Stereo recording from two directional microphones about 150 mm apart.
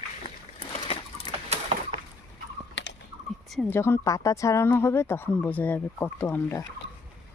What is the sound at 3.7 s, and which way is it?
Speech, 15° left (ahead or behind).